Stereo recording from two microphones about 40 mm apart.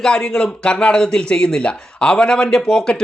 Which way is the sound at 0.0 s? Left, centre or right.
Left.